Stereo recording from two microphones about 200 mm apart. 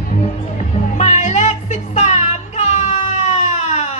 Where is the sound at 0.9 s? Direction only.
35° left (ahead or behind).